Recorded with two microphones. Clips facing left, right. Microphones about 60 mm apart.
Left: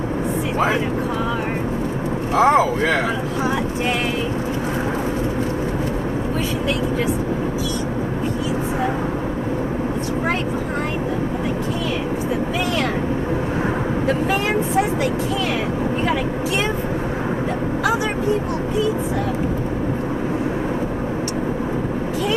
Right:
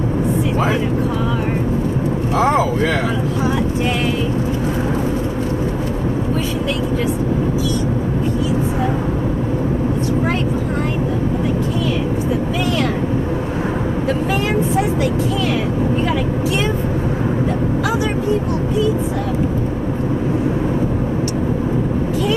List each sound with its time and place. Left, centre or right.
2.3 s speech: left